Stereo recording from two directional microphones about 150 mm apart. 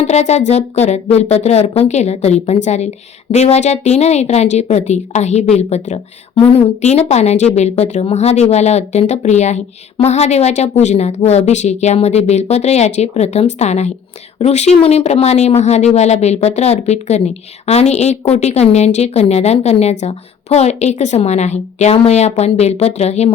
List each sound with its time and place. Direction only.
0.0 s speech: 45° left (ahead or behind)